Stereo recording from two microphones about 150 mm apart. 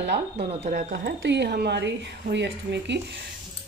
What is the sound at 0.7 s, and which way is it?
Speech, 60° right (ahead or behind).